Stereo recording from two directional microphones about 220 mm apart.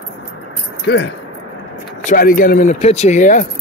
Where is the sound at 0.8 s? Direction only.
50° left (ahead or behind).